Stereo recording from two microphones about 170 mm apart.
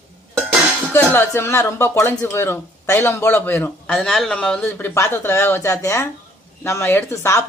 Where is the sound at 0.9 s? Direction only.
10° left (ahead or behind).